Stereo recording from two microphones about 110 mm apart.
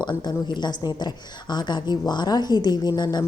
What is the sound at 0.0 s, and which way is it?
Speech, 40° left (ahead or behind).